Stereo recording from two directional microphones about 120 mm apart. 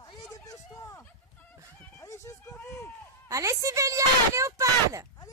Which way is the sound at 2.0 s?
25° left (ahead or behind).